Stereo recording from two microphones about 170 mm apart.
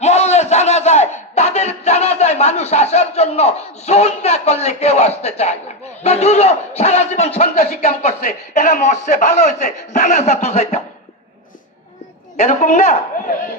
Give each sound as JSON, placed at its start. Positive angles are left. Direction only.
{"t": 0.0, "sound": "a sound", "side_deg": 40}
{"t": 6.0, "sound": "speech", "side_deg": 40}
{"t": 12.4, "sound": "a man's voice", "side_deg": 40}